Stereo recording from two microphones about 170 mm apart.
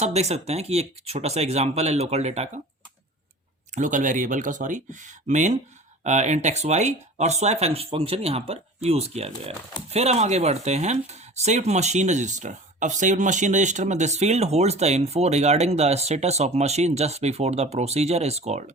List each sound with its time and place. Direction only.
0.0 s speech: 40° right (ahead or behind)
3.8 s speech: 50° right (ahead or behind)